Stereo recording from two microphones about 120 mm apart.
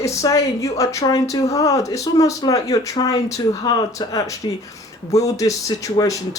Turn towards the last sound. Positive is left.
turn(degrees=25)  # may be behind; listen again after turning